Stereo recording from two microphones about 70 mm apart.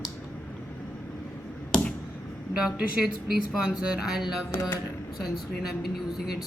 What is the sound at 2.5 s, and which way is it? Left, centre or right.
A woman's voice, centre.